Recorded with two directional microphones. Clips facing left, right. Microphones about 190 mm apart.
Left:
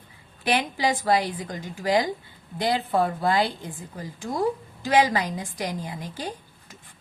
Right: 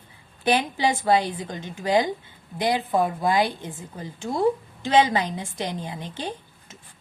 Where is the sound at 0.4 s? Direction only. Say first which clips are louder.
Right 2 dB; 25° right (ahead or behind).